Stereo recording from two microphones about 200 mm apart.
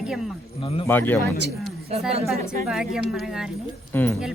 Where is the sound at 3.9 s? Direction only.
10° left (ahead or behind).